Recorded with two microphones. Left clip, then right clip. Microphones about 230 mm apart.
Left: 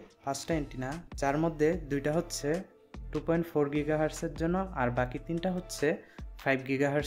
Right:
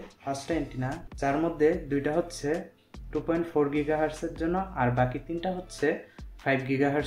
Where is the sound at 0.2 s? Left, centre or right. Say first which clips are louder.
Right 2 dB; left.